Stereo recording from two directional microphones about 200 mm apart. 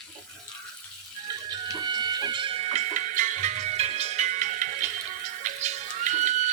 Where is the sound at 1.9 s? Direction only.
20° right (ahead or behind); by 4.9 s 40° right (ahead or behind).